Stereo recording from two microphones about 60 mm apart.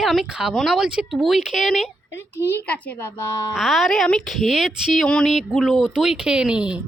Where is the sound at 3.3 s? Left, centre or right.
Left.